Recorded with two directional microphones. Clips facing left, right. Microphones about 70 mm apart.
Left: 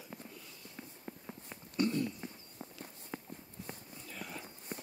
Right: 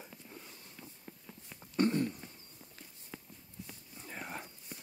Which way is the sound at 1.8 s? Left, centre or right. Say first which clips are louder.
Right 2 dB; right.